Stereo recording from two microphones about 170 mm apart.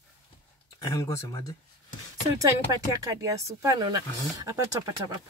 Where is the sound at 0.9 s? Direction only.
20° left (ahead or behind).